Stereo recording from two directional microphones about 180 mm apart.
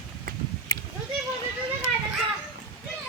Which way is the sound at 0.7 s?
20° left (ahead or behind).